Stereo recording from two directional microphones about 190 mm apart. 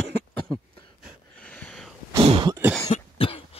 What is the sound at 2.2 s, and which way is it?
Cough, 25° right (ahead or behind).